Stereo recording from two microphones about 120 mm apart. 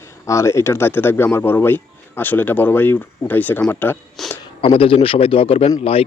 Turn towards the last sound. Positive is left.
turn(degrees=55)  # may be behind; listen again after turning